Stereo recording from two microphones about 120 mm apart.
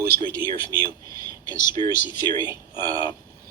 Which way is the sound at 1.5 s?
25° right (ahead or behind).